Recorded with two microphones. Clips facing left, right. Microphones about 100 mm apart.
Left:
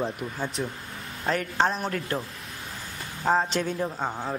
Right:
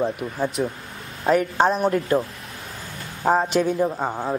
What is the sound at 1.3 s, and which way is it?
Speech, 10° right (ahead or behind).